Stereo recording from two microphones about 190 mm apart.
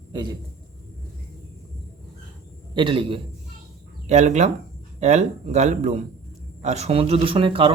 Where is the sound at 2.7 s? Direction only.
25° right (ahead or behind).